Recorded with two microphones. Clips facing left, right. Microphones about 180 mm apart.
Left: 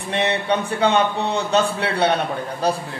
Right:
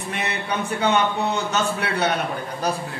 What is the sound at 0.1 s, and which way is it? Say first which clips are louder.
A man's voice: left 7 dB; 30° left (ahead or behind).